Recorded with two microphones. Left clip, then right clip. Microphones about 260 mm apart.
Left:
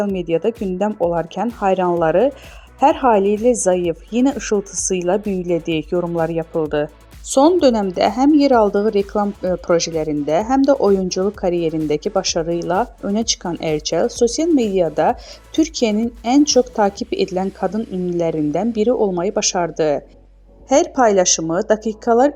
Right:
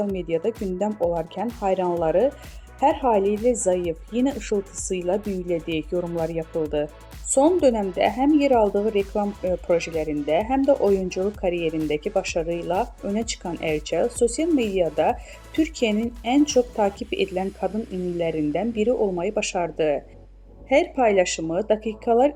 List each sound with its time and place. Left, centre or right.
0.0 s a woman's voice: centre